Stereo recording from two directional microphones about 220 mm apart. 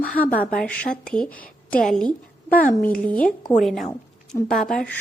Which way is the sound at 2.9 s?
5° left (ahead or behind).